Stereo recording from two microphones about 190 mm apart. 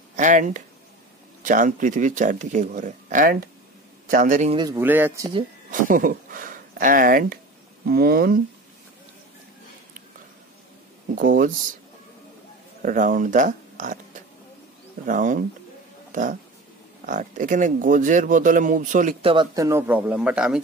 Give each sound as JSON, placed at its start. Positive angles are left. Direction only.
{"t": 0.1, "sound": "speech", "side_deg": -40}
{"t": 4.5, "sound": "speech", "side_deg": -25}
{"t": 4.7, "sound": "speech", "side_deg": -10}
{"t": 5.7, "sound": "speech", "side_deg": -45}
{"t": 11.1, "sound": "speech", "side_deg": -45}
{"t": 12.8, "sound": "speech", "side_deg": -45}
{"t": 15.0, "sound": "speech", "side_deg": -45}
{"t": 19.2, "sound": "speech", "side_deg": -25}